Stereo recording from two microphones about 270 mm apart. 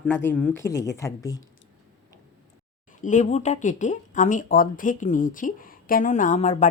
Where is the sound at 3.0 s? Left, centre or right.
Left.